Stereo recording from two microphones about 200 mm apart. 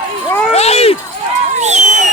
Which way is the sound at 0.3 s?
10° left (ahead or behind).